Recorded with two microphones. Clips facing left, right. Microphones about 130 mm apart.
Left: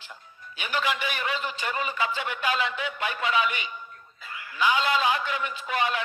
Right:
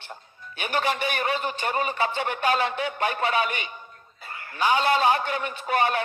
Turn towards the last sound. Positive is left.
turn(degrees=-50)  # may be behind; listen again after turning